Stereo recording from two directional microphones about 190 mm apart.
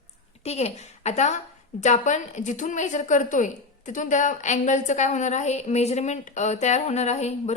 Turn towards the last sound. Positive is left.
turn(degrees=35)  # may be behind; listen again after turning